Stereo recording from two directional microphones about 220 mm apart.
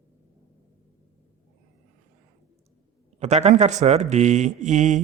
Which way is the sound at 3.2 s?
30° right (ahead or behind).